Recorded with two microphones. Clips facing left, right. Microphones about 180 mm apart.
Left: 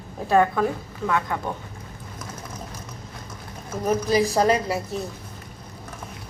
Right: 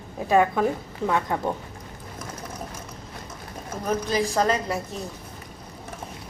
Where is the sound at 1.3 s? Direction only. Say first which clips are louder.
Right 2 dB; 25° right (ahead or behind).